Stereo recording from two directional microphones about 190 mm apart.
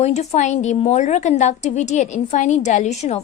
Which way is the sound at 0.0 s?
35° left (ahead or behind).